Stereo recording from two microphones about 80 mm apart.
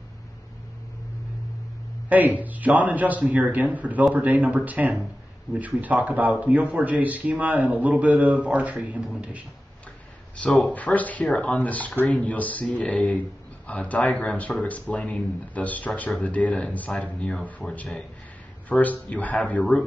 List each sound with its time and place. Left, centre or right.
2.0 s a man's voice: right
10.7 s speech: centre